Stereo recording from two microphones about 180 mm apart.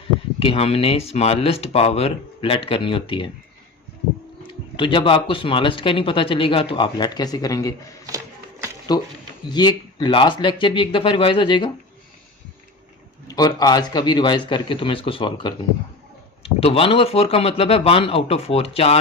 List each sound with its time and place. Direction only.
0.3 s speech: 30° left (ahead or behind)
4.4 s speech: 25° left (ahead or behind)
8.0 s a sound: 15° right (ahead or behind)
9.5 s speech: 25° left (ahead or behind)
13.2 s speech: 20° left (ahead or behind)